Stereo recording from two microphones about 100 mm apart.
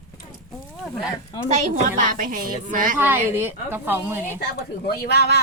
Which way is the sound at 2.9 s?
20° right (ahead or behind).